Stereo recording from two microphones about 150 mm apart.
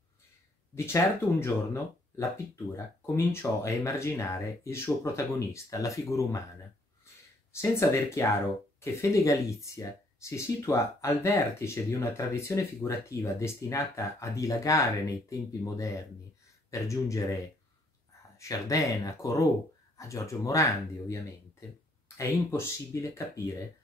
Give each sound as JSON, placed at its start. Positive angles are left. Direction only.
{"t": 0.7, "sound": "speech", "side_deg": 15}
{"t": 7.8, "sound": "speech", "side_deg": 20}
{"t": 18.4, "sound": "speech", "side_deg": 20}